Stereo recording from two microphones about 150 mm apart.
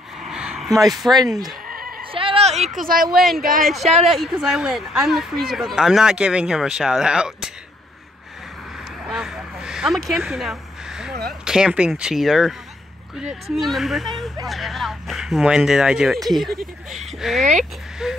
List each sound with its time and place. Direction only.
0.2 s a sound: 5° right (ahead or behind)
1.0 s speech: 5° right (ahead or behind)
1.7 s bleat: 75° right (ahead or behind)
2.1 s a sound: 40° right (ahead or behind)
2.8 s speech: 75° right (ahead or behind)
3.1 s speech: centre (ahead or behind)
3.3 s speech: 70° right (ahead or behind)
3.6 s speech: centre (ahead or behind)
9.0 s a sound: 5° right (ahead or behind)
11.2 s speech: 5° right (ahead or behind)